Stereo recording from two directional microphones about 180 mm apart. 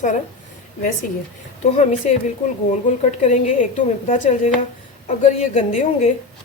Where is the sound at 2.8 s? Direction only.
45° left (ahead or behind).